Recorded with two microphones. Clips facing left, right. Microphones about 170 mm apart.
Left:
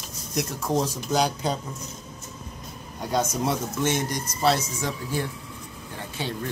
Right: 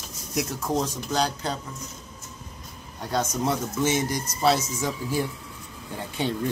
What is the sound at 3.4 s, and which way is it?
Speech, 5° right (ahead or behind).